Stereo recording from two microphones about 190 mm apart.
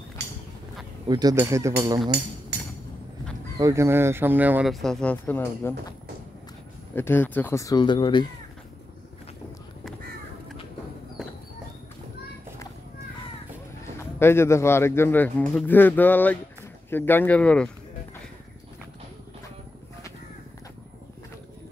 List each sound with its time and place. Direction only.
1.0 s speech: 20° right (ahead or behind)
3.5 s speech: 15° right (ahead or behind); by 5.9 s 10° left (ahead or behind)
7.0 s speech: 10° left (ahead or behind)
13.9 s speech: 15° left (ahead or behind)